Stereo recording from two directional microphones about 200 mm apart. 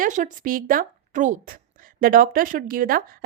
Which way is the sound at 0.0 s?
40° right (ahead or behind).